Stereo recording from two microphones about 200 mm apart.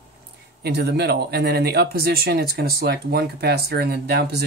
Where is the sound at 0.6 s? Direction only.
55° right (ahead or behind).